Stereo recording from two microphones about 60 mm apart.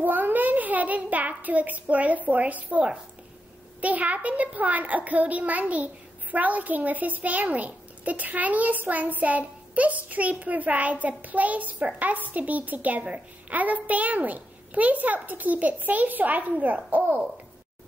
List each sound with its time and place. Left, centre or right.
0.0 s a child's voice: right